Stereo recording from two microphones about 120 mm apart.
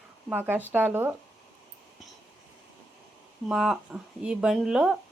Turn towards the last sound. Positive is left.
turn(degrees=-5)  # may be behind; listen again after turning